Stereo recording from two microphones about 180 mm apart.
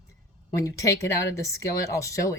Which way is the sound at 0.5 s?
15° left (ahead or behind).